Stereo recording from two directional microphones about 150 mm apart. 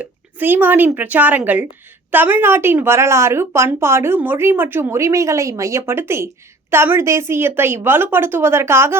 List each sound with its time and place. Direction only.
0.0 s a woman's voice: 15° right (ahead or behind)